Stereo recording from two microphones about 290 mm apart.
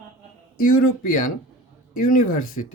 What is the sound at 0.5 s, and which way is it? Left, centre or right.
Speech, left.